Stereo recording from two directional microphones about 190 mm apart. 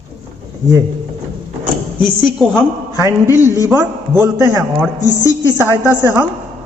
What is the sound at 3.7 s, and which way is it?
A man's voice, 10° right (ahead or behind).